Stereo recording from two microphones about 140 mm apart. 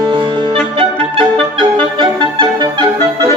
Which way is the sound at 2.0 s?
35° right (ahead or behind).